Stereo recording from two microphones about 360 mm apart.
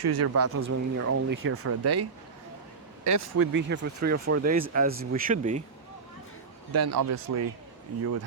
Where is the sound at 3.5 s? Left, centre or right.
Right.